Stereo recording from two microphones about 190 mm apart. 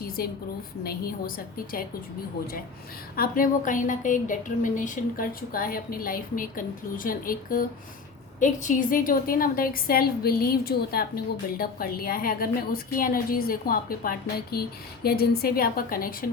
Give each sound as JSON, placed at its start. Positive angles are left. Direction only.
{"t": 0.2, "sound": "a woman's voice", "side_deg": 50}
{"t": 3.2, "sound": "a woman's voice", "side_deg": 45}